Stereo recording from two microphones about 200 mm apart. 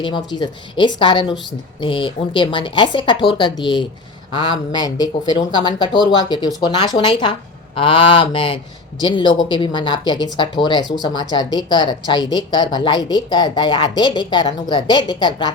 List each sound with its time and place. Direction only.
0.0 s a woman's voice: 20° left (ahead or behind)